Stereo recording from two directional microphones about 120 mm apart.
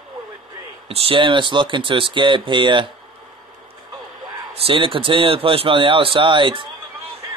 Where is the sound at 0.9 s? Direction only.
55° right (ahead or behind).